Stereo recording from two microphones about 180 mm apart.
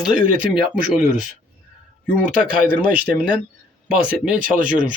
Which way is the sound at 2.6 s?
50° right (ahead or behind).